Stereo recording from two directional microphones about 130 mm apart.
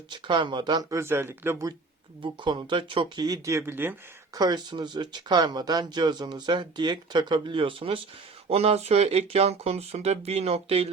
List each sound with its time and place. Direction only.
0.1 s speech: 35° right (ahead or behind); by 1.7 s 20° right (ahead or behind)
2.2 s speech: 35° right (ahead or behind); by 3.9 s 15° right (ahead or behind)
4.4 s speech: 35° right (ahead or behind); by 10.8 s 50° right (ahead or behind)